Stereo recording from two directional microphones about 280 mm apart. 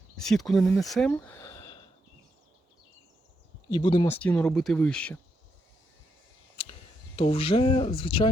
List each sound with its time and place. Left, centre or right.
0.2 s speech: centre
3.7 s speech: centre
7.2 s speech: centre